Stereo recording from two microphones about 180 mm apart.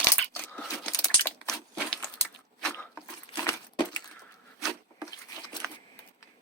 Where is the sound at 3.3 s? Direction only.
25° left (ahead or behind).